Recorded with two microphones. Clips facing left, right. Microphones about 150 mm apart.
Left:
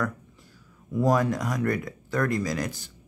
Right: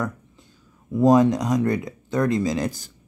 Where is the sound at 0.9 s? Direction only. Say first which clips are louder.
Right 7 dB; 20° right (ahead or behind).